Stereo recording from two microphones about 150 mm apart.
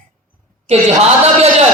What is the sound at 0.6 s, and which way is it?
Speech, 45° right (ahead or behind).